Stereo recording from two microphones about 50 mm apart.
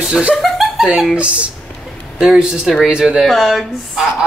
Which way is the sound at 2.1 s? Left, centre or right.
Centre.